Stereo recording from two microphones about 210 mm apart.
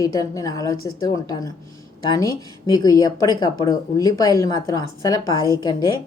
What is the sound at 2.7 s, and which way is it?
A woman's voice, 20° left (ahead or behind).